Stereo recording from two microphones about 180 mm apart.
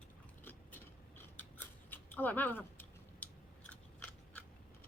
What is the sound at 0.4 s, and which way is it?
Scissors, 10° left (ahead or behind).